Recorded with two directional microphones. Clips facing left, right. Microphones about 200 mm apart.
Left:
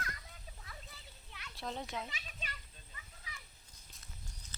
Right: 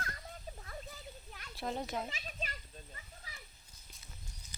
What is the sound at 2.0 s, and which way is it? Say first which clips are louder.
Children playing: right 4 dB; 40° right (ahead or behind).